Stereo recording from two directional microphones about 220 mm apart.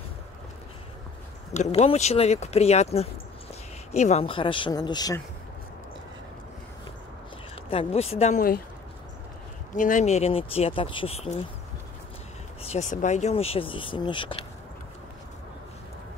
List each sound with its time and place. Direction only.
1.5 s speech: 30° left (ahead or behind)
7.7 s speech: 25° left (ahead or behind)
9.8 s speech: 35° left (ahead or behind)
12.6 s speech: 30° left (ahead or behind)